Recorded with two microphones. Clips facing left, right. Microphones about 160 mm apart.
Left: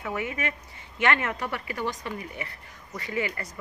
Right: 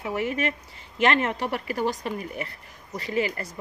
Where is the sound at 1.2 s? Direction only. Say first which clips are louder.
Right 4 dB; 30° right (ahead or behind).